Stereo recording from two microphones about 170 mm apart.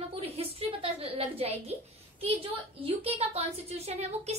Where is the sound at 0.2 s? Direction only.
35° right (ahead or behind).